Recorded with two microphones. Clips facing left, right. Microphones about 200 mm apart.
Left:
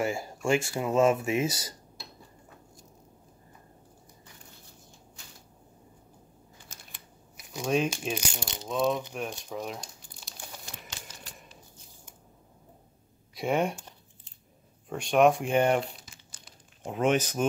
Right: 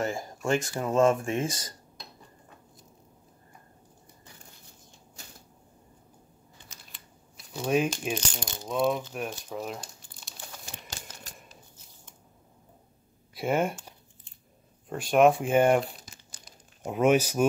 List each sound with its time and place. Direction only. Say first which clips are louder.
0.0 s speech: left 1 dB; 10° left (ahead or behind)
7.6 s speech: right 1 dB; 10° right (ahead or behind)
8.1 s speech: right 1 dB; 10° left (ahead or behind)
8.6 s speech: right 1 dB; centre (ahead or behind)
10.9 s typewriter: right 2 dB; 45° right (ahead or behind)
13.3 s speech: right 1 dB; centre (ahead or behind)
14.9 s speech: right 1 dB; centre (ahead or behind)
16.0 s crumpling: right 2 dB; 40° right (ahead or behind)
16.8 s speech: right 3 dB; 10° right (ahead or behind)